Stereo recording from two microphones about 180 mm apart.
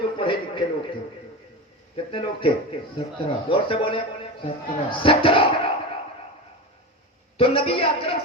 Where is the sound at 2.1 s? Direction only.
30° left (ahead or behind).